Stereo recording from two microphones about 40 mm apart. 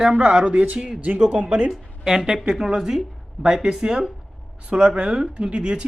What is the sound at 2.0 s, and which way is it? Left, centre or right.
A woman's voice, centre.